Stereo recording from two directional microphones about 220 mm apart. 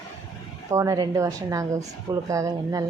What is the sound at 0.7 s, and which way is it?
Speech, 15° right (ahead or behind).